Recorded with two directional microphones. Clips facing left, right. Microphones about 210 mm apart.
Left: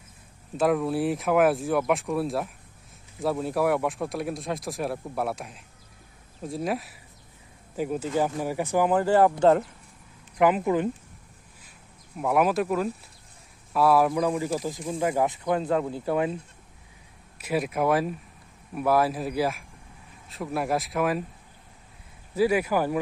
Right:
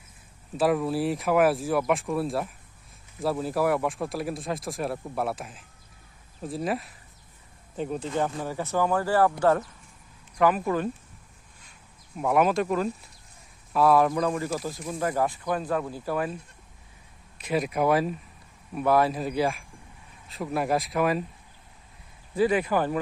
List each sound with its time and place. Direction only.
0.5 s speech: centre (ahead or behind); by 10.9 s 20° left (ahead or behind)
12.1 s speech: centre (ahead or behind); by 16.4 s 25° left (ahead or behind)
17.3 s speech: 5° left (ahead or behind)
22.4 s speech: 10° left (ahead or behind)